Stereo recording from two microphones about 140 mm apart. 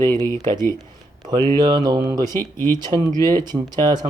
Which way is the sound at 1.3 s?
30° right (ahead or behind).